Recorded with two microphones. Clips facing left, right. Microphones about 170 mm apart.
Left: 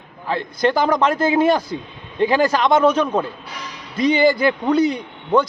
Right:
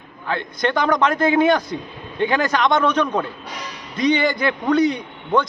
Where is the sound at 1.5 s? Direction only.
30° left (ahead or behind).